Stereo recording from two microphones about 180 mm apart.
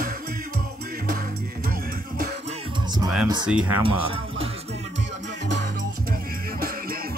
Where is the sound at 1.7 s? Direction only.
50° right (ahead or behind).